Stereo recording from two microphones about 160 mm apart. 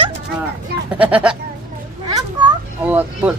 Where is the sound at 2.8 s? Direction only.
10° right (ahead or behind).